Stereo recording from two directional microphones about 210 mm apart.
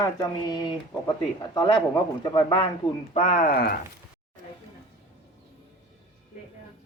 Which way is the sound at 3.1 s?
35° left (ahead or behind).